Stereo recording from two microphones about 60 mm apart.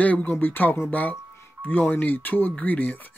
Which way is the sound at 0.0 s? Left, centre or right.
Left.